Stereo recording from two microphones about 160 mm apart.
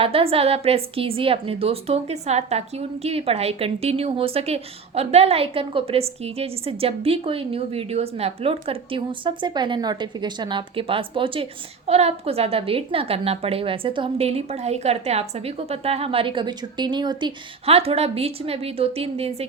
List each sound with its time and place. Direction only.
0.0 s a woman's voice: 35° right (ahead or behind)